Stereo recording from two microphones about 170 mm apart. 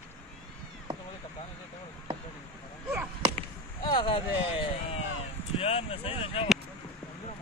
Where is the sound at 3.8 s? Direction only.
30° left (ahead or behind).